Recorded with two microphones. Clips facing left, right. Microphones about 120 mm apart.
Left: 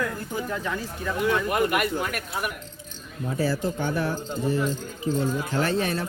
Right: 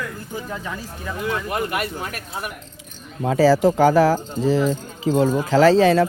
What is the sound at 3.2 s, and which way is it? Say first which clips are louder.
Speech: right 11 dB; 90° right.